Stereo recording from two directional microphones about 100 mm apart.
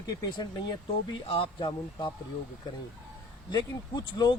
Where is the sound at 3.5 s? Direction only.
45° left (ahead or behind).